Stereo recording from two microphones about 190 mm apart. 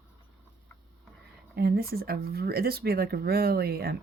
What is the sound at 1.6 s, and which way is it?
Speech, 55° right (ahead or behind).